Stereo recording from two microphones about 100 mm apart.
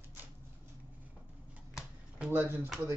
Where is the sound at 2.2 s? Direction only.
20° right (ahead or behind).